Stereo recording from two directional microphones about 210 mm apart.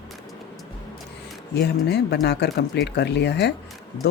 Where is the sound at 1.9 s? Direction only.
55° left (ahead or behind).